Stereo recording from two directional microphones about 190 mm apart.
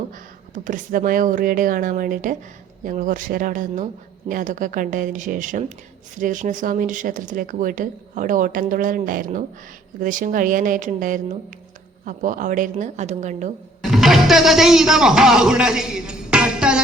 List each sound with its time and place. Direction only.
0.5 s a woman's voice: 45° right (ahead or behind)
13.9 s speech: centre (ahead or behind)